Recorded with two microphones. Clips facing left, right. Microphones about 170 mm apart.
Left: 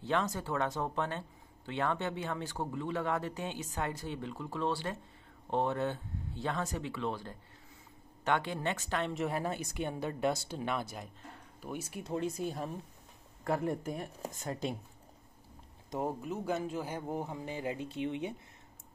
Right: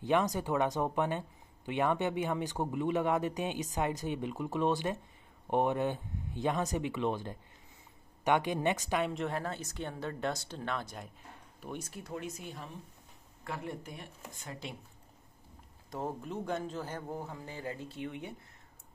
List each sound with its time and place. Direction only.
0.0 s speech: 15° right (ahead or behind)
9.1 s speech: 5° left (ahead or behind)
12.0 s speech: 30° left (ahead or behind)
15.9 s speech: 10° left (ahead or behind)